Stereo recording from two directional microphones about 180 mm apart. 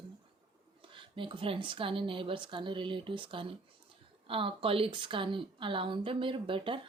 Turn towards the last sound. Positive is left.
turn(degrees=-30)  # may be behind; listen again after turning